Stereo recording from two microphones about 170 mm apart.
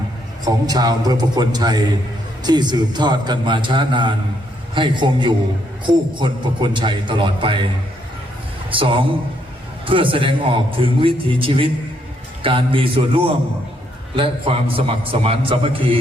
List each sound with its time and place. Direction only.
0.4 s a man's voice: 25° right (ahead or behind)
8.7 s a man's voice: 30° right (ahead or behind)